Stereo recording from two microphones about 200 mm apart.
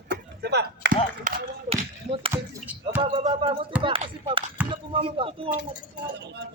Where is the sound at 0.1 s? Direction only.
55° right (ahead or behind).